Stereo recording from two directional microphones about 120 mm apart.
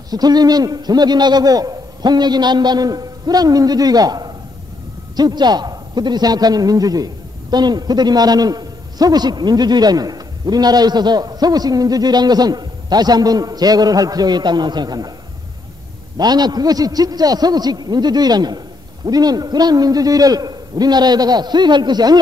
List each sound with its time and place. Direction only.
0.1 s a man's voice: 35° right (ahead or behind)
16.2 s a man's voice: 35° right (ahead or behind)